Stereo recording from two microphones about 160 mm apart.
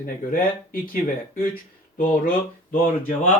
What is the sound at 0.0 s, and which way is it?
Speech, 60° left (ahead or behind).